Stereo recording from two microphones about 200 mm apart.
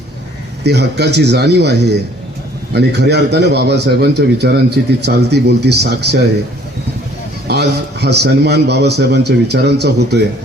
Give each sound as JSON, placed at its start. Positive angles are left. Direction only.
{"t": 0.6, "sound": "a man's voice", "side_deg": -55}
{"t": 7.4, "sound": "a man's voice", "side_deg": -55}